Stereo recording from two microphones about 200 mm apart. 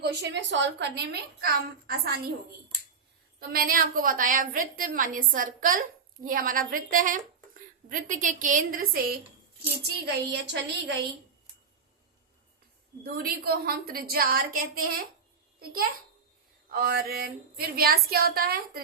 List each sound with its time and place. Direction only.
0.0 s a woman's voice: 55° right (ahead or behind)
3.5 s a woman's voice: 45° right (ahead or behind)
10.3 s a woman's voice: 60° right (ahead or behind)
13.0 s a woman's voice: 50° right (ahead or behind)